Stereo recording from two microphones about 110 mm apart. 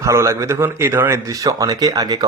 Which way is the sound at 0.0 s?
25° right (ahead or behind).